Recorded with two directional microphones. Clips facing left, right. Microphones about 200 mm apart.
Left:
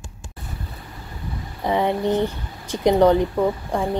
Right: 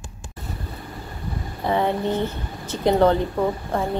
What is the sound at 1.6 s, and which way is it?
A woman's voice, 15° left (ahead or behind).